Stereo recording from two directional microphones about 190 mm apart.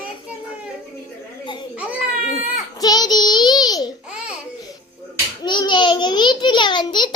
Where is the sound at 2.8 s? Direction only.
20° left (ahead or behind).